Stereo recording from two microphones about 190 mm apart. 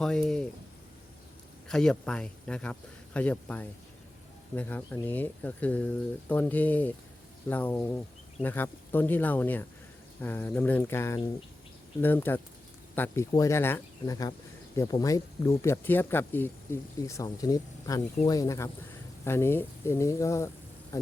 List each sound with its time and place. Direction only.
0.0 s speech: 5° left (ahead or behind)
1.6 s speech: 5° left (ahead or behind)